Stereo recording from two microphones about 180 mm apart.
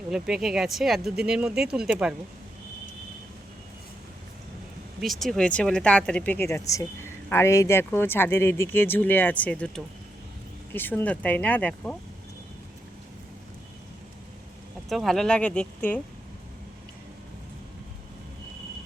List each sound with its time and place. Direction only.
0.1 s speech: 5° right (ahead or behind)
4.9 s speech: centre (ahead or behind)
14.8 s speech: centre (ahead or behind)